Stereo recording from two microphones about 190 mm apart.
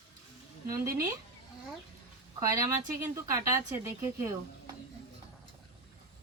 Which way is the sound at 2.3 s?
15° right (ahead or behind).